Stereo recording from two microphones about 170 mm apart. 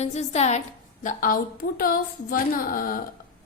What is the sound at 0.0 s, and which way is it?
Speech, 40° left (ahead or behind).